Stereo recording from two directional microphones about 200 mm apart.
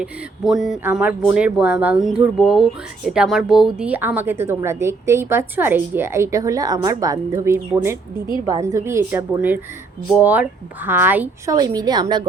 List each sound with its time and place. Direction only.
0.0 s a woman's voice: centre (ahead or behind); by 12.2 s 20° right (ahead or behind)